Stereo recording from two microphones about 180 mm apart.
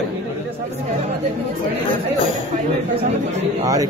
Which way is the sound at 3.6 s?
20° right (ahead or behind).